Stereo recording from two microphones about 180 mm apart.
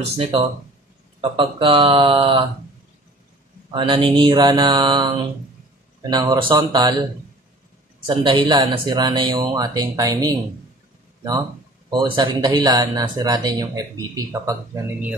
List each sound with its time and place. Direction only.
0.2 s speech: 30° right (ahead or behind)
3.7 s speech: 25° right (ahead or behind)
8.1 s speech: 25° right (ahead or behind)
11.9 s speech: 25° right (ahead or behind)